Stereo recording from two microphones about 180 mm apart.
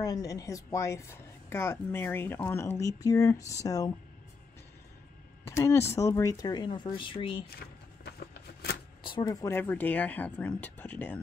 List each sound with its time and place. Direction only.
0.0 s speech: 20° left (ahead or behind)
5.4 s speech: 15° left (ahead or behind)
9.0 s speech: 25° left (ahead or behind)